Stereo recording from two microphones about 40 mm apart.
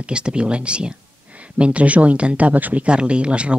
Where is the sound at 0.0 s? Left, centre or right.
Right.